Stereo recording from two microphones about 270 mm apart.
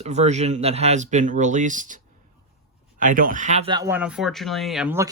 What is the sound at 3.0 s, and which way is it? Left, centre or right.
Speech, right.